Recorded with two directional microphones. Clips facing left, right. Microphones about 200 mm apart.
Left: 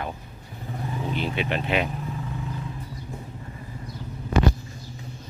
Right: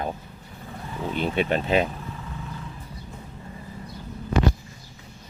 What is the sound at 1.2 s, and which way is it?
Speech, 45° right (ahead or behind).